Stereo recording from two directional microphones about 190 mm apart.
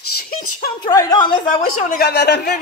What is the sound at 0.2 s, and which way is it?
Speech, 50° left (ahead or behind).